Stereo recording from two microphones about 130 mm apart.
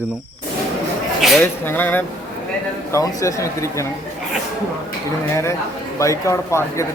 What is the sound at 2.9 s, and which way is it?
Speech, 25° left (ahead or behind).